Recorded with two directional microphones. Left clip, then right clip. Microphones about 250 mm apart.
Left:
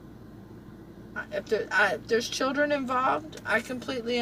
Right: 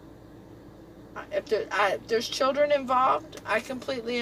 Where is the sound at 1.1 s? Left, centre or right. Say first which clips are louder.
Right 1 dB; centre.